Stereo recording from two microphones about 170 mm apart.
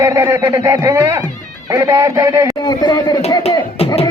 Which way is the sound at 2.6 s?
25° left (ahead or behind).